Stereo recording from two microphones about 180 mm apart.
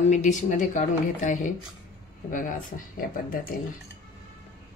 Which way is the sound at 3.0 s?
50° left (ahead or behind).